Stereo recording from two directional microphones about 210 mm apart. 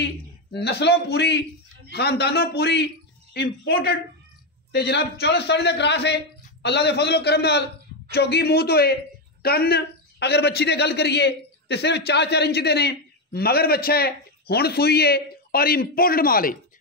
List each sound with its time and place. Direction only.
0.5 s a man's voice: 50° left (ahead or behind)